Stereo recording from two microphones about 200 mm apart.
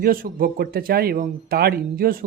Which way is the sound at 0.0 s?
45° right (ahead or behind).